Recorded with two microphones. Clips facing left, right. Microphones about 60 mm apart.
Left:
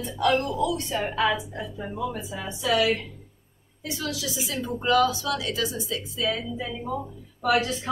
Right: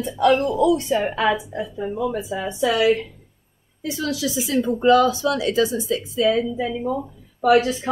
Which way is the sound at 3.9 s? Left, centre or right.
Right.